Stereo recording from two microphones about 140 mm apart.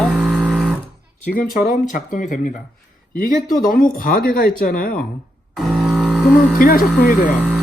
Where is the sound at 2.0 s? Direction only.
65° left (ahead or behind).